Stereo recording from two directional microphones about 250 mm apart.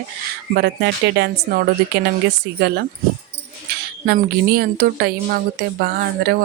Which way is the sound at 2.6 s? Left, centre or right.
Right.